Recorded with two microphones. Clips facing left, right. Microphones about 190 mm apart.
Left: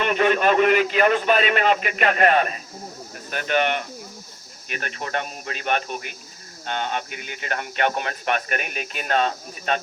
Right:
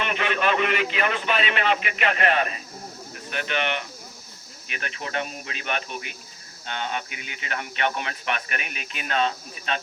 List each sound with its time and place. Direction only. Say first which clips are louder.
0.0 s a man's voice: left 6 dB; 45° left (ahead or behind)